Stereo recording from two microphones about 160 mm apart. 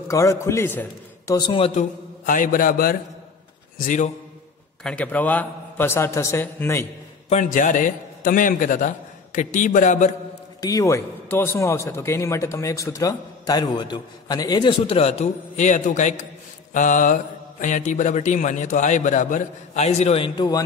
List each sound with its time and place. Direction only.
0.1 s a man's voice: 20° left (ahead or behind)
1.5 s a woman's voice: 35° left (ahead or behind)
2.2 s a man's voice: 55° left (ahead or behind)
4.8 s a man's voice: 10° left (ahead or behind)
7.2 s speech: 50° left (ahead or behind)
10.6 s a man's voice: 20° left (ahead or behind)